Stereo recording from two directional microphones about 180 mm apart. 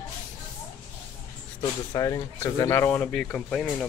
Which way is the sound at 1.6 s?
20° left (ahead or behind).